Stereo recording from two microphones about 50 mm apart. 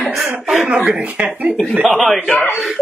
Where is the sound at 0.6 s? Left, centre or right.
Right.